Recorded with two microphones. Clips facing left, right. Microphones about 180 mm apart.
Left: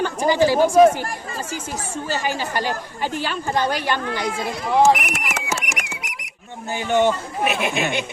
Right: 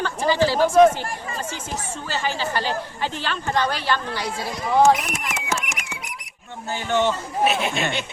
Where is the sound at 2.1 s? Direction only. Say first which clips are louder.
Left 1 dB; 10° left (ahead or behind).